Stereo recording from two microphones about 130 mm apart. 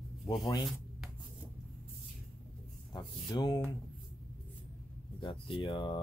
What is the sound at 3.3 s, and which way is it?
Speech, 30° left (ahead or behind).